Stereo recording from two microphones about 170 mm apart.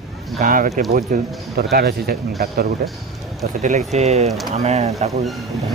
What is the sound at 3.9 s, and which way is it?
Speech, 40° right (ahead or behind).